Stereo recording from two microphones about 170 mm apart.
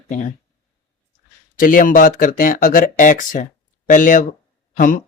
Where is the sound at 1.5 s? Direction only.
55° left (ahead or behind).